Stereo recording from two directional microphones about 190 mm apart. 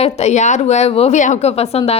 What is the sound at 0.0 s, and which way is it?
A woman's voice, 35° left (ahead or behind).